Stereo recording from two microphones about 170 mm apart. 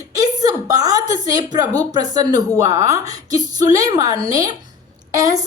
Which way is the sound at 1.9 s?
25° right (ahead or behind).